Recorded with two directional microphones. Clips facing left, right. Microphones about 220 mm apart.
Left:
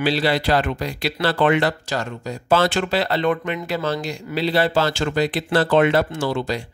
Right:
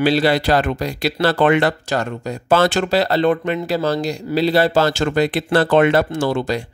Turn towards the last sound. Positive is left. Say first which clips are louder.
# right 4 dB
turn(degrees=-50)  # may be behind; listen again after turning